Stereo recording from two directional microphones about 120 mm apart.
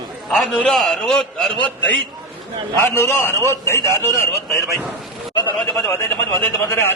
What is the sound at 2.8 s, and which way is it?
A man's voice, 20° left (ahead or behind).